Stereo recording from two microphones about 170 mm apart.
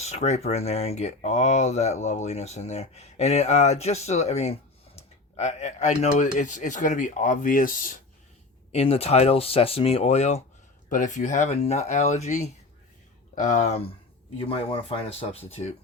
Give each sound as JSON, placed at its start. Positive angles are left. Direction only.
{"t": 0.0, "sound": "speech", "side_deg": 40}
{"t": 8.7, "sound": "speech", "side_deg": 35}